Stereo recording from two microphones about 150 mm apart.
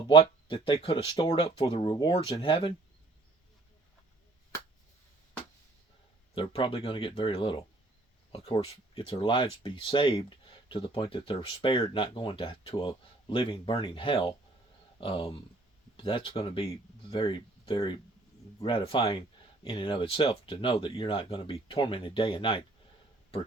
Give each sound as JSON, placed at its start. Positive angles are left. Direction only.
{"t": 0.1, "sound": "speech", "side_deg": 35}
{"t": 6.3, "sound": "speech", "side_deg": 35}
{"t": 8.6, "sound": "speech", "side_deg": 40}